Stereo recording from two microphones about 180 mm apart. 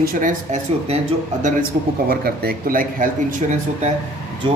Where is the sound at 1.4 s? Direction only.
45° right (ahead or behind).